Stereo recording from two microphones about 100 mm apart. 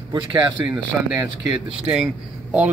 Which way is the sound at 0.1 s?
50° right (ahead or behind).